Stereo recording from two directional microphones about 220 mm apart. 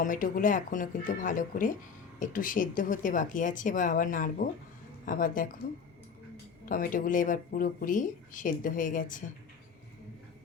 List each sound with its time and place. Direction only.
0.0 s speech: 40° left (ahead or behind)